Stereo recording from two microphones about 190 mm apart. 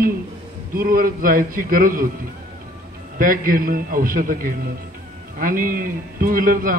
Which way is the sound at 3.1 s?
50° right (ahead or behind).